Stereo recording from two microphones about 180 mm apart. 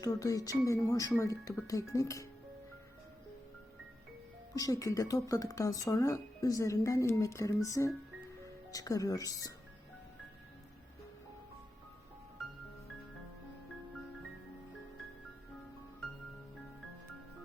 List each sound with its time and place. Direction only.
0.0 s speech: 20° left (ahead or behind)
4.5 s speech: 20° left (ahead or behind)